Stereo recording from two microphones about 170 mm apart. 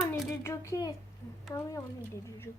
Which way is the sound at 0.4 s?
15° left (ahead or behind).